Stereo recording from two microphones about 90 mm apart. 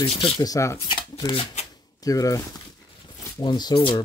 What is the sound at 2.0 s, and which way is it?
Speech, 40° left (ahead or behind).